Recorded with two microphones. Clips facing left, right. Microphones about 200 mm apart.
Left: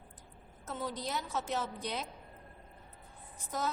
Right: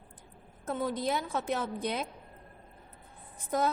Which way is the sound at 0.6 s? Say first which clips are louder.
Right 7 dB; 55° right (ahead or behind).